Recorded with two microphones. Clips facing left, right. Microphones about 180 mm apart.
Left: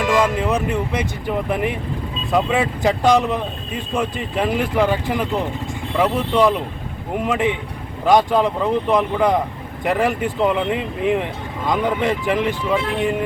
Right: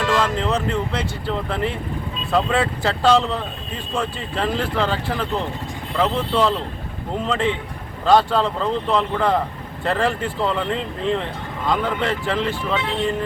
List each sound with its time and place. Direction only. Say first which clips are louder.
0.0 s speech: left 3 dB; 15° left (ahead or behind)